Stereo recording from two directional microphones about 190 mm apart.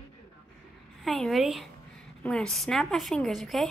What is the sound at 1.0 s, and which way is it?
A woman's voice, centre (ahead or behind).